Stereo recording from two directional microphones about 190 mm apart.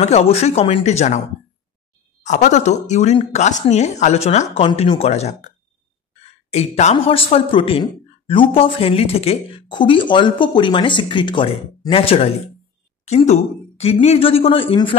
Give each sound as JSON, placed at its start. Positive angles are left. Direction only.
{"t": 0.0, "sound": "speech", "side_deg": 35}
{"t": 2.2, "sound": "speech", "side_deg": 40}
{"t": 6.5, "sound": "a man's voice", "side_deg": 35}